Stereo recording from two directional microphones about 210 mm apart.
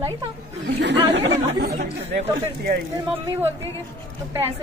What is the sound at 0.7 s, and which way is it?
Speech, 55° right (ahead or behind).